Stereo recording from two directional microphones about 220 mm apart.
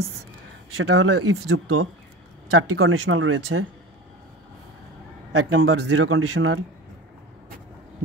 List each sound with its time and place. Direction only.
0.7 s speech: 70° right (ahead or behind)
5.3 s speech: 65° right (ahead or behind)